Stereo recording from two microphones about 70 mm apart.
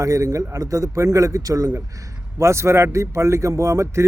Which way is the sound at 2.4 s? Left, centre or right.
Right.